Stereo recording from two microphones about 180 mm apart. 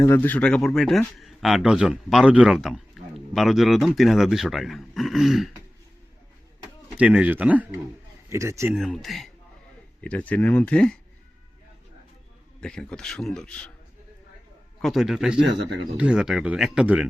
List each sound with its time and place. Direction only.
0.0 s speech: 15° left (ahead or behind)
6.9 s speech: 5° right (ahead or behind)
8.7 s speech: centre (ahead or behind)
12.5 s speech: 5° left (ahead or behind)
14.8 s speech: centre (ahead or behind)